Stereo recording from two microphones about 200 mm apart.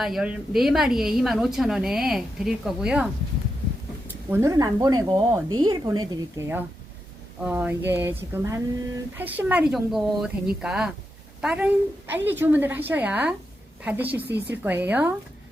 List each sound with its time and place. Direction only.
0.0 s a woman's voice: 5° right (ahead or behind)
4.3 s a woman's voice: 15° right (ahead or behind)